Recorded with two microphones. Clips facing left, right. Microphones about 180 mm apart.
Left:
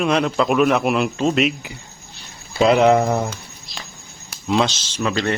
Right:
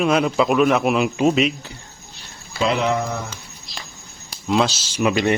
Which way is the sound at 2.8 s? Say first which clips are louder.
Left 7 dB; 50° left (ahead or behind).